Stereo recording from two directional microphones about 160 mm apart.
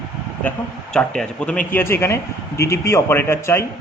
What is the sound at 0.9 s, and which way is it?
Speech, 5° left (ahead or behind).